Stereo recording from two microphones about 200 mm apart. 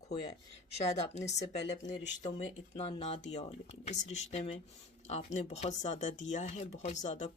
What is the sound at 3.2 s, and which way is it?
Speech, 35° left (ahead or behind).